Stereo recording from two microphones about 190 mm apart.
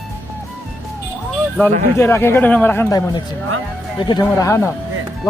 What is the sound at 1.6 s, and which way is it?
A man's voice, 15° left (ahead or behind).